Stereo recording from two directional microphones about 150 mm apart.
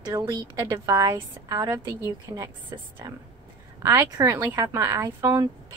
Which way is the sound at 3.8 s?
20° right (ahead or behind).